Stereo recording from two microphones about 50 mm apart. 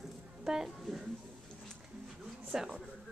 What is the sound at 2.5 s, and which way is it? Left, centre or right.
Speech, centre.